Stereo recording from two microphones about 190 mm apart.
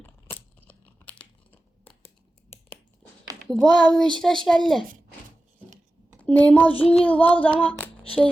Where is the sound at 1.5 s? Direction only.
10° left (ahead or behind).